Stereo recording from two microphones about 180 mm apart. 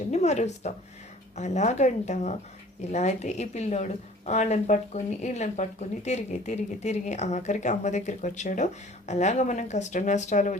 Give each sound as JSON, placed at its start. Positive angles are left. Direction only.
{"t": 0.1, "sound": "speech", "side_deg": 40}